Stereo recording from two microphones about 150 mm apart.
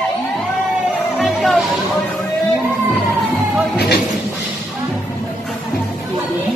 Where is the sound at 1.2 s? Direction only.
Centre (ahead or behind).